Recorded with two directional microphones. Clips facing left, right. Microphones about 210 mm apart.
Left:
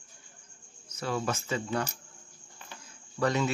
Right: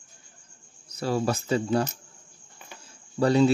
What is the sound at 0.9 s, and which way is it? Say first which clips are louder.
Speech: right 6 dB; 35° right (ahead or behind).